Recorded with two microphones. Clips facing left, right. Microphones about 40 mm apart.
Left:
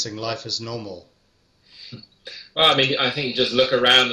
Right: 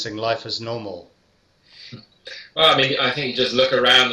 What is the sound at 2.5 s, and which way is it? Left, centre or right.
Speech, centre.